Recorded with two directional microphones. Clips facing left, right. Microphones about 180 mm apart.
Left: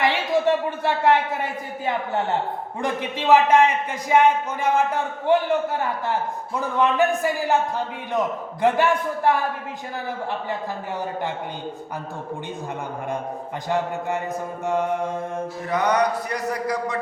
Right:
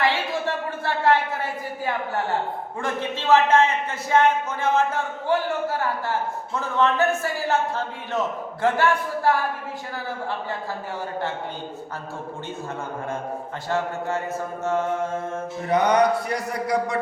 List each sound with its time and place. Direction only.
0.0 s a man's voice: 15° left (ahead or behind)
8.6 s a man's voice: 20° left (ahead or behind)
13.7 s a man's voice: 15° left (ahead or behind)
15.7 s a sound: 25° right (ahead or behind)